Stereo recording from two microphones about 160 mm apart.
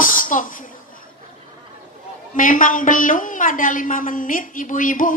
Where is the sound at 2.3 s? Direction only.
55° left (ahead or behind).